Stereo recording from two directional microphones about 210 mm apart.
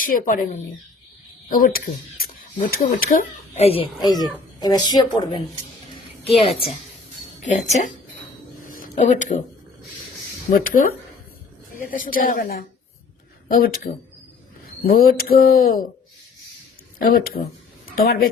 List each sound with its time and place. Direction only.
0.0 s a woman's voice: 40° left (ahead or behind)
8.6 s a sound: 40° left (ahead or behind)
10.5 s speech: 45° left (ahead or behind)
17.0 s speech: 45° left (ahead or behind)